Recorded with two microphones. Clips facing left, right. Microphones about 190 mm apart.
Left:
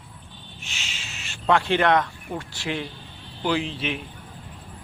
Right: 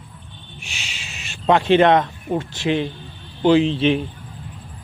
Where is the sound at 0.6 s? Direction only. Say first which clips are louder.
Right 3 dB; 15° right (ahead or behind); by 4.1 s 30° right (ahead or behind).